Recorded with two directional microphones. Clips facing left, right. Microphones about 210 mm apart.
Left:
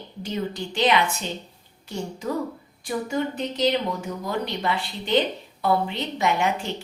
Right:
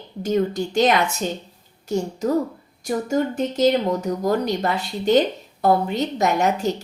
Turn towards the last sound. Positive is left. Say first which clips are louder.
# right 4 dB
turn(degrees=-40)  # may be behind; listen again after turning